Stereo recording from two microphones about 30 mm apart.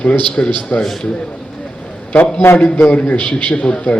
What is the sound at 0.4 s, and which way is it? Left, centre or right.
Speech, left.